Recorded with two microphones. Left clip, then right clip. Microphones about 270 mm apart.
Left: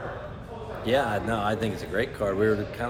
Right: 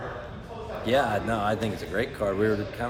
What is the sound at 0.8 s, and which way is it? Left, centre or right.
A man's voice, centre.